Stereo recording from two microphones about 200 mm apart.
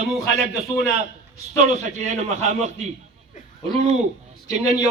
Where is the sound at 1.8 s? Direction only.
35° right (ahead or behind).